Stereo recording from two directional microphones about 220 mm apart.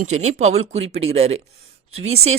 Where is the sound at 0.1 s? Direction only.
30° right (ahead or behind).